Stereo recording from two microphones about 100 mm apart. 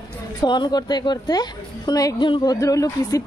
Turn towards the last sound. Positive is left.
turn(degrees=35)  # may be behind; listen again after turning